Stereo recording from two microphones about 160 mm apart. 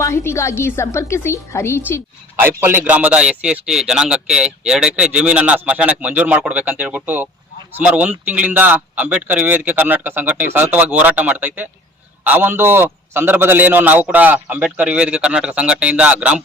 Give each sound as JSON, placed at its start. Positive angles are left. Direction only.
{"t": 0.0, "sound": "a woman's voice", "side_deg": 15}
{"t": 2.3, "sound": "a man's voice", "side_deg": -15}